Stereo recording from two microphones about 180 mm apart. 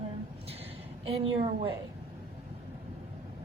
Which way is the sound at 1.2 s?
30° right (ahead or behind).